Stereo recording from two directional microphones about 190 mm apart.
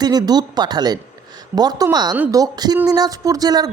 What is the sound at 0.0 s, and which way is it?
A woman's voice, 20° right (ahead or behind).